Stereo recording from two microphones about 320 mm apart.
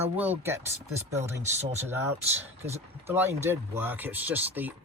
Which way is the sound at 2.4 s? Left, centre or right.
Centre.